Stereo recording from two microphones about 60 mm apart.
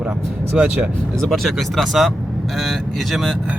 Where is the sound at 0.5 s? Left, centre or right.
Right.